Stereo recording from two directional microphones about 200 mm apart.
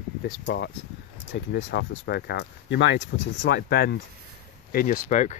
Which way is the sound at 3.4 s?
50° left (ahead or behind).